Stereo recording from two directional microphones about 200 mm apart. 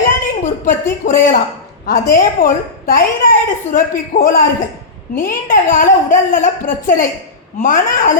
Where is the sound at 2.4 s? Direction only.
45° left (ahead or behind).